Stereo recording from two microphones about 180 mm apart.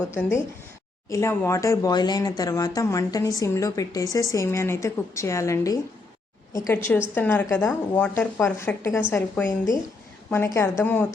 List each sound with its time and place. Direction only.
1.1 s speech: 15° left (ahead or behind)